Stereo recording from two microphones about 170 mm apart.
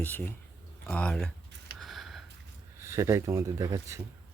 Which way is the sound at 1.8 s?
Centre (ahead or behind).